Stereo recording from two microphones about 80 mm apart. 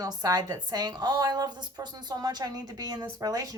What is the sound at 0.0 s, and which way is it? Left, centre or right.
A woman's voice, right.